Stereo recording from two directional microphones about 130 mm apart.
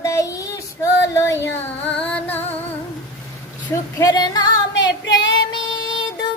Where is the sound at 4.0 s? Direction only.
30° left (ahead or behind).